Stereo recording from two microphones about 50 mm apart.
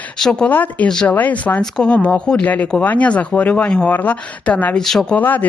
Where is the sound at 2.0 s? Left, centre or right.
Left.